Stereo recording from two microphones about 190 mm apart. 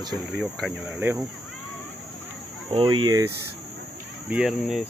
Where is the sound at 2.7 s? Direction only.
25° right (ahead or behind).